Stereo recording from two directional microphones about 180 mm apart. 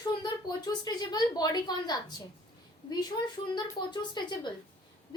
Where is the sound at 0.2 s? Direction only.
25° left (ahead or behind).